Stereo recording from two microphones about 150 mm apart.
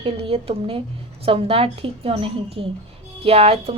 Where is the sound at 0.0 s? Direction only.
40° right (ahead or behind).